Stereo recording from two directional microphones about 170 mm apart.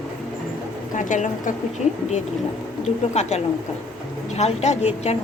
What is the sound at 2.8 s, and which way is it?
A woman's voice, 40° left (ahead or behind).